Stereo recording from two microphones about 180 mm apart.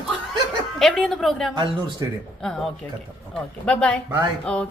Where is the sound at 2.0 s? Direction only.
20° right (ahead or behind).